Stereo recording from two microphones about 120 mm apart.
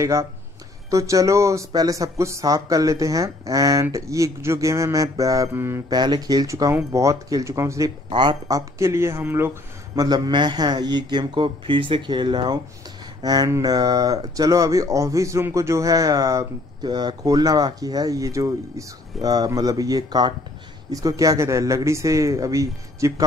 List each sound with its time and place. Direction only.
0.0 s speech: 25° right (ahead or behind)
5.9 s speech: 35° right (ahead or behind)
8.1 s speech: 40° right (ahead or behind); by 9.5 s 20° right (ahead or behind)
9.9 s speech: 35° right (ahead or behind)